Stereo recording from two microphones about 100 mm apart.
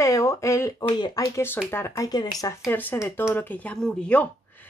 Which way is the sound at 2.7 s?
20° left (ahead or behind).